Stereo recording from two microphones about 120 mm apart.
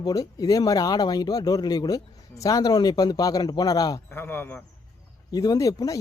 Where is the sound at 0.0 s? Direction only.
30° left (ahead or behind).